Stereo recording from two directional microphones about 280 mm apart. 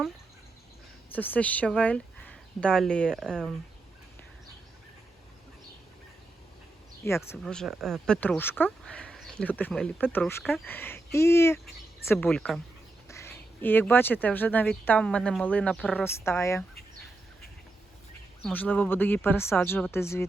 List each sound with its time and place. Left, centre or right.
1.1 s speech: centre
7.0 s speech: centre
18.4 s speech: centre